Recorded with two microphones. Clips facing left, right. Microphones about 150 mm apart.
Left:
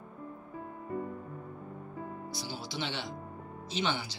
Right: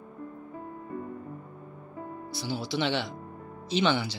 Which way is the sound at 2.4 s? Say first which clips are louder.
Right 10 dB; 70° right (ahead or behind).